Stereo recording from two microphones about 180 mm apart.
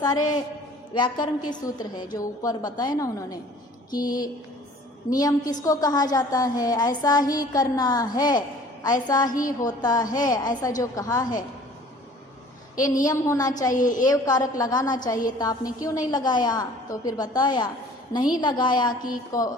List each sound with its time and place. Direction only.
0.0 s a woman's voice: 20° left (ahead or behind)
13.1 s a woman's voice: 20° left (ahead or behind)
13.7 s a woman's voice: 45° left (ahead or behind)
14.0 s a woman's voice: 20° left (ahead or behind)